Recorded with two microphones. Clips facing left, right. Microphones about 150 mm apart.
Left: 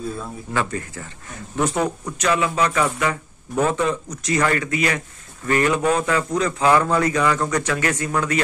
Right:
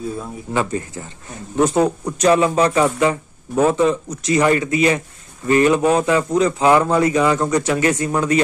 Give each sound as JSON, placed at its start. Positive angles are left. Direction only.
{"t": 0.5, "sound": "a man's voice", "side_deg": -20}